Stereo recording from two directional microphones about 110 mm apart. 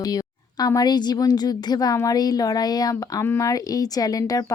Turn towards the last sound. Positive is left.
turn(degrees=35)  # may be behind; listen again after turning